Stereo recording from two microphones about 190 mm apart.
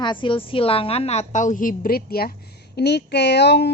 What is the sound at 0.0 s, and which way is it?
A woman's voice, 25° left (ahead or behind).